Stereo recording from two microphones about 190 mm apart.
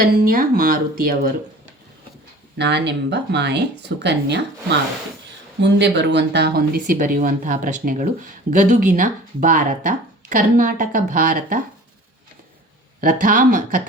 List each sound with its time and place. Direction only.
0.0 s speech: 50° right (ahead or behind)
2.6 s speech: 65° right (ahead or behind)
5.5 s speech: 65° right (ahead or behind); by 11.6 s 45° right (ahead or behind)
13.0 s speech: 45° right (ahead or behind)